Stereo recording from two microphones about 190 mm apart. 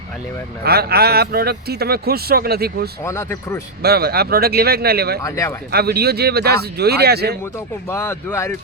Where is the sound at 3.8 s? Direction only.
55° right (ahead or behind).